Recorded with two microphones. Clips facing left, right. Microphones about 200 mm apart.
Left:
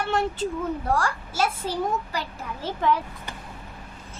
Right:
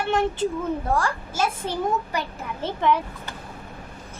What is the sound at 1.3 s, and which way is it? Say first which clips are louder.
Speech: left 1 dB; 20° right (ahead or behind).